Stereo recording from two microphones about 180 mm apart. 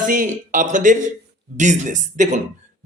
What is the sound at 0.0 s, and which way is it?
A man's voice, 45° right (ahead or behind).